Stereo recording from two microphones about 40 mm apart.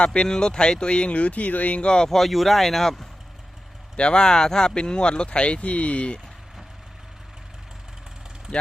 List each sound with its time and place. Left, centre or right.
0.0 s speech: left
1.8 s speech: left
2.0 s speech: centre
3.9 s speech: left